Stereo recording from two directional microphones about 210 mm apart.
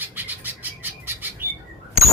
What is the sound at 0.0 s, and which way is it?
Bird, 10° right (ahead or behind).